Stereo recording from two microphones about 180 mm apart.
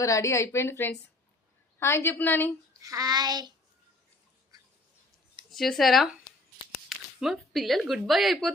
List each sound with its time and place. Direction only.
0.0 s a woman's voice: 15° left (ahead or behind)
2.8 s a sound: 20° right (ahead or behind)
5.5 s speech: centre (ahead or behind)